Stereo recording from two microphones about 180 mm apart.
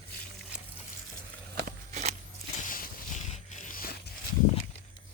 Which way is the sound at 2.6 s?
50° left (ahead or behind).